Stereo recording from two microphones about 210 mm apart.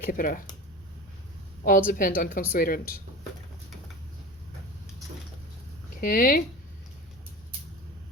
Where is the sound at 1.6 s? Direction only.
40° left (ahead or behind).